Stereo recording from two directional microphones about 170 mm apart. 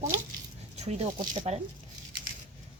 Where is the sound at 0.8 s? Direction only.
40° right (ahead or behind).